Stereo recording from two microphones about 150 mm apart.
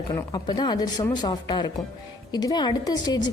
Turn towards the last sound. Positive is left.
turn(degrees=25)  # may be behind; listen again after turning